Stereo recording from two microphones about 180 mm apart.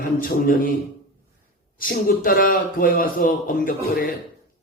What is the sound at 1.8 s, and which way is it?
A man's voice, 55° left (ahead or behind).